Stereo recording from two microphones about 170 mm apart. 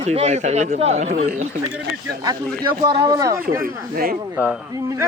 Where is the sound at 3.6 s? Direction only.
60° right (ahead or behind).